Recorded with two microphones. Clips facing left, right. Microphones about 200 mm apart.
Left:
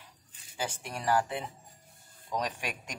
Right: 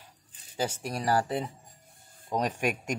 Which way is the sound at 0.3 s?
40° right (ahead or behind).